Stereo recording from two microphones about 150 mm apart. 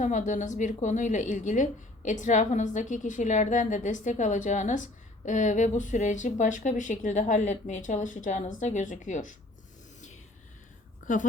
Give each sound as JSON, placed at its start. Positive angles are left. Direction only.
{"t": 0.0, "sound": "a woman's voice", "side_deg": 55}
{"t": 11.0, "sound": "speech", "side_deg": 60}